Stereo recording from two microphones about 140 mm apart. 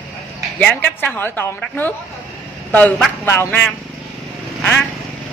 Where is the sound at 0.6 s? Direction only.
10° left (ahead or behind).